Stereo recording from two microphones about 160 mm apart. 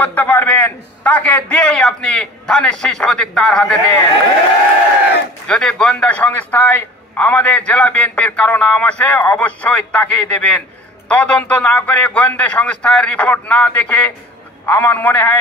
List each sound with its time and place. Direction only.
0.0 s a man's voice: 10° left (ahead or behind)
5.5 s a man's voice: 5° left (ahead or behind)